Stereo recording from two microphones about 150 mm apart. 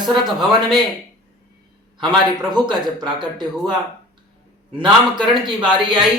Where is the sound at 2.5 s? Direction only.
30° right (ahead or behind).